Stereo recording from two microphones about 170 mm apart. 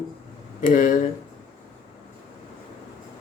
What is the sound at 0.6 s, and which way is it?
Speech, 50° left (ahead or behind).